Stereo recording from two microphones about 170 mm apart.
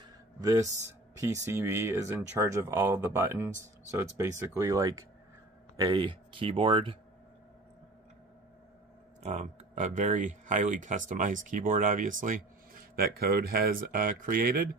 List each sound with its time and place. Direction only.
0.4 s speech: 20° right (ahead or behind)
9.2 s speech: 40° right (ahead or behind)
12.9 s speech: 65° right (ahead or behind)